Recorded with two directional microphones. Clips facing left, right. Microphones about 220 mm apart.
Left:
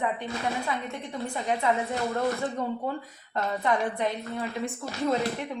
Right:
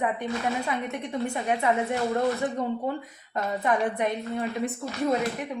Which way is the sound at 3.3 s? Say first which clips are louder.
Right 1 dB; 20° right (ahead or behind).